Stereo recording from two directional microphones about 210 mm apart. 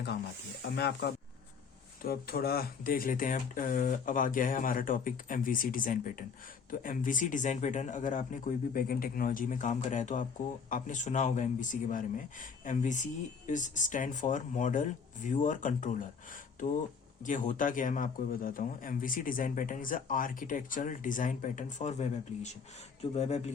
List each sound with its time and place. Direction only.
0.6 s speech: 50° left (ahead or behind)
17.2 s speech: 35° left (ahead or behind)